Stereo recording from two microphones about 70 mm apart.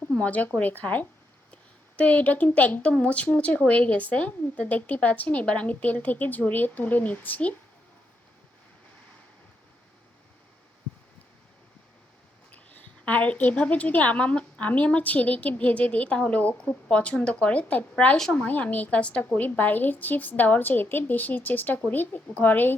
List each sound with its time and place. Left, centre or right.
0.2 s a woman's voice: left
12.5 s a woman's voice: left
18.4 s a woman's voice: left